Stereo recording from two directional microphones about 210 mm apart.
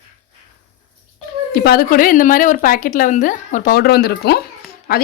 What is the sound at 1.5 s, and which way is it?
A woman's voice, 50° left (ahead or behind).